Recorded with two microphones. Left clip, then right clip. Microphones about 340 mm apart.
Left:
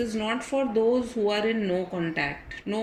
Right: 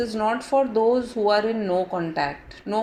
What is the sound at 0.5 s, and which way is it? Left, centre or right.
Speech, right.